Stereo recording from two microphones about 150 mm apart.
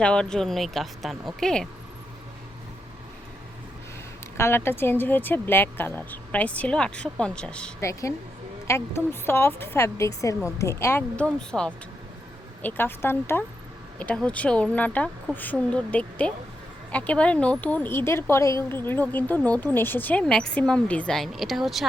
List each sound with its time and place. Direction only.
0.0 s speech: 5° left (ahead or behind)
4.4 s speech: 15° left (ahead or behind)
7.8 s speech: 20° left (ahead or behind)
11.3 s speech: 5° left (ahead or behind)